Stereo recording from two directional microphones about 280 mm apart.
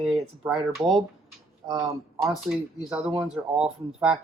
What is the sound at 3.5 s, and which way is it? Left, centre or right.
Speech, right.